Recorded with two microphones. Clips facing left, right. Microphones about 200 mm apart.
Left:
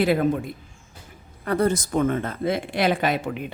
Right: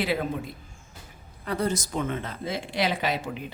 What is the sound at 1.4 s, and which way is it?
Speech, 55° left (ahead or behind).